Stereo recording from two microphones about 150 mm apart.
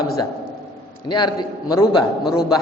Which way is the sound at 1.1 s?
30° left (ahead or behind).